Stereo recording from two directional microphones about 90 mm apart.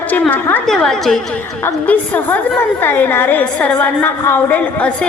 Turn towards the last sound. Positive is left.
turn(degrees=20)  # may be behind; listen again after turning